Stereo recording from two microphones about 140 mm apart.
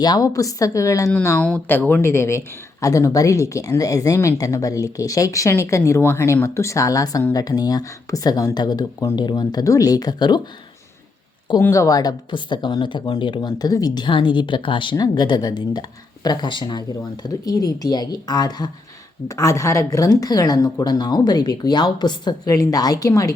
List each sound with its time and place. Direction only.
0.0 s speech: 25° left (ahead or behind)
11.6 s speech: 20° left (ahead or behind)